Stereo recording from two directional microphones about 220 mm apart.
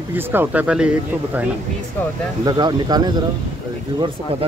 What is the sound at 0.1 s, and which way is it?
Speech, 10° right (ahead or behind).